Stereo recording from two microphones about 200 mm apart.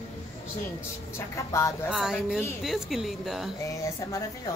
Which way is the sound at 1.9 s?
5° right (ahead or behind).